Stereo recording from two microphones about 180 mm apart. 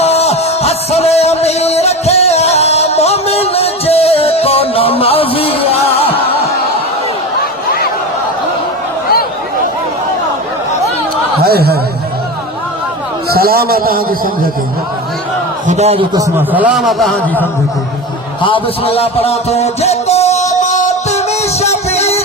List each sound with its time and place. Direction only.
0.0 s music: 35° left (ahead or behind)
11.4 s a sound: 60° right (ahead or behind)
13.3 s a man's voice: 55° right (ahead or behind)
15.6 s a man's voice: 40° right (ahead or behind)
16.1 s a man's voice: 15° right (ahead or behind); by 17.4 s 5° left (ahead or behind)
18.4 s a sound: 30° left (ahead or behind)